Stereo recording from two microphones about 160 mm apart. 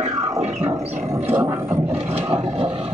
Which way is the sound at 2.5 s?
35° right (ahead or behind).